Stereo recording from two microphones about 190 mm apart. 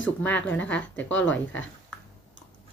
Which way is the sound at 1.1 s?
80° left.